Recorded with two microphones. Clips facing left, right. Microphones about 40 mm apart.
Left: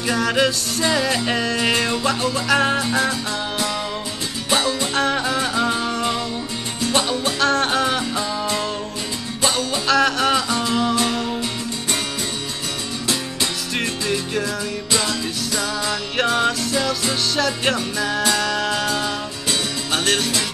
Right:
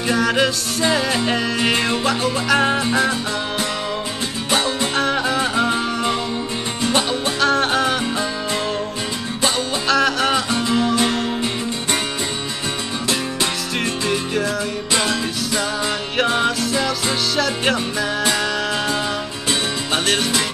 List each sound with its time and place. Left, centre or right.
0.2 s music: centre
1.6 s music: centre
2.4 s music: centre
4.9 s music: centre
5.2 s music: centre
6.9 s music: centre
7.3 s music: centre
9.8 s music: centre
10.5 s music: centre
15.0 s music: right
16.3 s music: centre
18.2 s music: right
18.5 s music: centre